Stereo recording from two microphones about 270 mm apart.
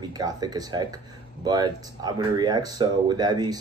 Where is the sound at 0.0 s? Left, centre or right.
Centre.